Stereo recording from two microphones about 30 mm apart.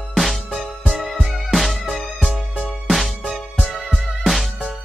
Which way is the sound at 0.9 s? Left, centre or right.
Centre.